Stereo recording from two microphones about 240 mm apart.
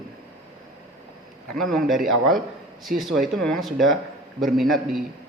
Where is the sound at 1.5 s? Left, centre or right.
Centre.